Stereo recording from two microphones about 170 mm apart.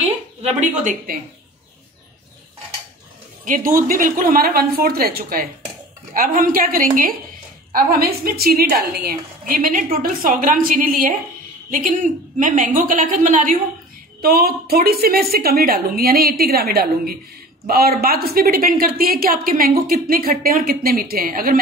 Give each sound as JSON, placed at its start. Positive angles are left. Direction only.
{"t": 0.4, "sound": "a woman's voice", "side_deg": -40}
{"t": 3.4, "sound": "a woman's voice", "side_deg": -55}
{"t": 14.2, "sound": "a woman's voice", "side_deg": -60}